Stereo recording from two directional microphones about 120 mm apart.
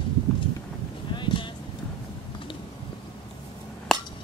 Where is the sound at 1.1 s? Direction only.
40° left (ahead or behind).